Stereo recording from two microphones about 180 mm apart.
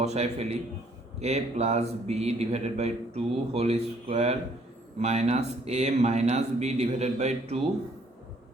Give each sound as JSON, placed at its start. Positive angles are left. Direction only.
{"t": 0.0, "sound": "a man's voice", "side_deg": -35}